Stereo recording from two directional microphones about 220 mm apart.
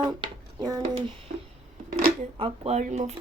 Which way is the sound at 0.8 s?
25° right (ahead or behind).